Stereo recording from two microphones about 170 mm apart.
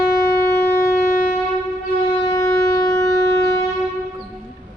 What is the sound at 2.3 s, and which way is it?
Shofar, 20° left (ahead or behind).